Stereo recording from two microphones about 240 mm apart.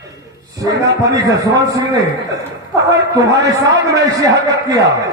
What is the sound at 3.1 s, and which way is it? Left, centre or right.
A man's voice, centre.